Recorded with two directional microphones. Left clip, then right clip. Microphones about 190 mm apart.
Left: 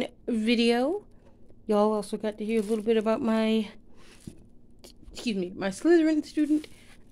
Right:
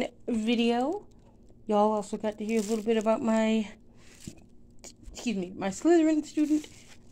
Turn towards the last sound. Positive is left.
turn(degrees=30)  # may be behind; listen again after turning